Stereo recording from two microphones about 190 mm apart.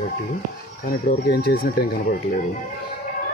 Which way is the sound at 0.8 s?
50° left (ahead or behind).